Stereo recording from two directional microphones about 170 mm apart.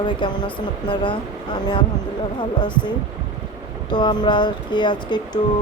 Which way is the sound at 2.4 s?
25° left (ahead or behind).